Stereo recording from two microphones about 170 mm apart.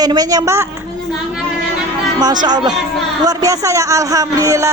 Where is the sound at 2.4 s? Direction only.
25° right (ahead or behind).